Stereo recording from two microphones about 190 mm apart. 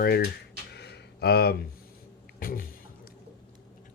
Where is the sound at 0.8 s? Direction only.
60° left (ahead or behind).